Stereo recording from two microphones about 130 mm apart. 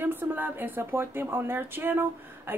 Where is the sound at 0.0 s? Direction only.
15° right (ahead or behind).